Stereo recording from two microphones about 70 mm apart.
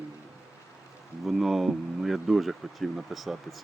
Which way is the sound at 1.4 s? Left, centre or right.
Centre.